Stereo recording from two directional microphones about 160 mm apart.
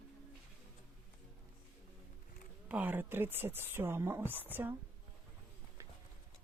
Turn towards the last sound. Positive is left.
turn(degrees=-20)  # may be behind; listen again after turning